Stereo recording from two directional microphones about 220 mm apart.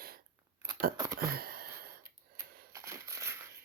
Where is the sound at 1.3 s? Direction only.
45° right (ahead or behind).